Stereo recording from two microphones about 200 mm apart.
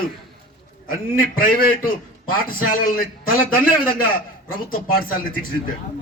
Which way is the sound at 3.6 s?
45° left (ahead or behind).